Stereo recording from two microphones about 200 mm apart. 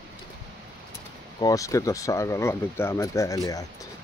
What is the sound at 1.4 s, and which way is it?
Speech, 15° left (ahead or behind).